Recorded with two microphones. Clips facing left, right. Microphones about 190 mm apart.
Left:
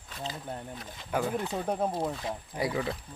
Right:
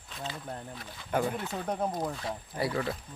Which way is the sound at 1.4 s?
15° left (ahead or behind).